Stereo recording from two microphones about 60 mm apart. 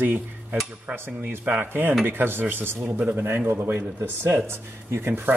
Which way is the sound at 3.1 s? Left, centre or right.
Right.